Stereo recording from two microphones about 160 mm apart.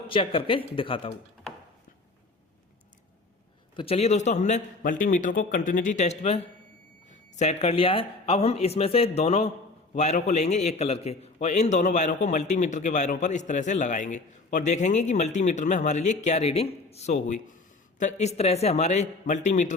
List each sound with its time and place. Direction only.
0.1 s speech: 35° left (ahead or behind)
3.8 s a man's voice: 40° left (ahead or behind)